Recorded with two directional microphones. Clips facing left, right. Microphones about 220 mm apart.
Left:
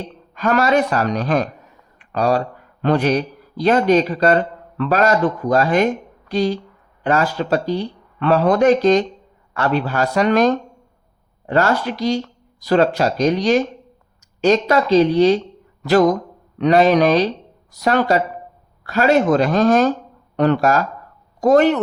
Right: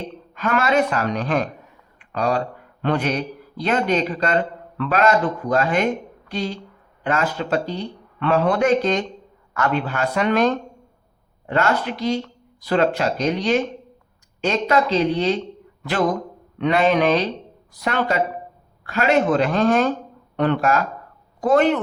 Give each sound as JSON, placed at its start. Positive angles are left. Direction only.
{"t": 0.3, "sound": "speech", "side_deg": 40}
{"t": 2.0, "sound": "a sound", "side_deg": 40}
{"t": 2.8, "sound": "a woman's voice", "side_deg": 40}